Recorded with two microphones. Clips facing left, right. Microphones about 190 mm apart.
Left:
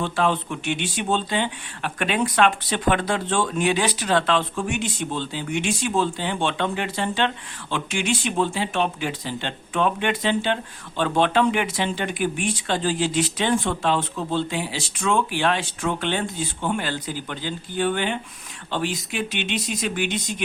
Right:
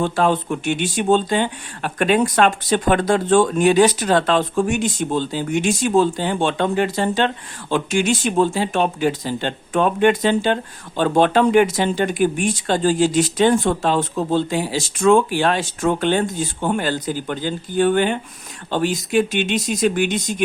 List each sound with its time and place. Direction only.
0.0 s speech: 45° right (ahead or behind)